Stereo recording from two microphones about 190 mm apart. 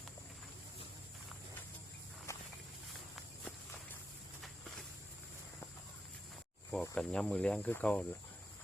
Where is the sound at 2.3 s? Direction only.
15° left (ahead or behind).